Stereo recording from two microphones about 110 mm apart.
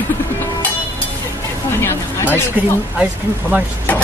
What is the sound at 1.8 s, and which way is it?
Speech, 25° left (ahead or behind).